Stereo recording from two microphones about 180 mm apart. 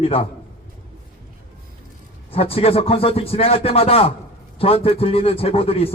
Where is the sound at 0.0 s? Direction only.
30° left (ahead or behind).